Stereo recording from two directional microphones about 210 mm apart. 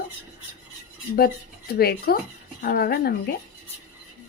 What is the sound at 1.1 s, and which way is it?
Speech, 45° left (ahead or behind).